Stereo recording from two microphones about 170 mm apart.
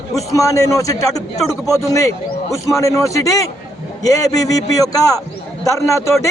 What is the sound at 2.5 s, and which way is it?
A man's voice, 20° left (ahead or behind).